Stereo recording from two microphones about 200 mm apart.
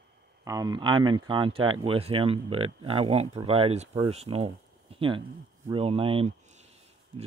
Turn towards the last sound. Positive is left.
turn(degrees=-30)  # may be behind; listen again after turning